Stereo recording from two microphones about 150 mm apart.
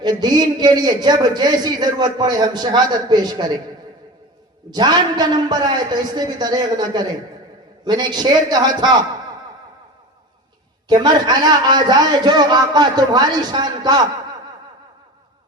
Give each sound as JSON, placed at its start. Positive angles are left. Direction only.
{"t": 0.0, "sound": "a man's voice", "side_deg": -30}
{"t": 4.7, "sound": "a man's voice", "side_deg": -30}
{"t": 10.8, "sound": "a man's voice", "side_deg": -30}